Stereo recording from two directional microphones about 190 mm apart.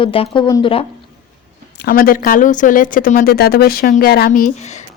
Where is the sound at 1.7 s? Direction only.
50° left (ahead or behind); by 4.8 s 35° left (ahead or behind).